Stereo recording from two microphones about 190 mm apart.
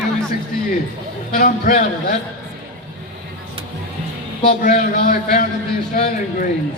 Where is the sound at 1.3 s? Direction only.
45° left (ahead or behind).